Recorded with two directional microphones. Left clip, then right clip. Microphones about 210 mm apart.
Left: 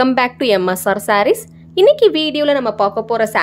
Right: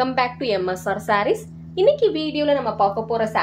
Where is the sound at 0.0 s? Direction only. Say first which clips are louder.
Left 6 dB; 45° left (ahead or behind).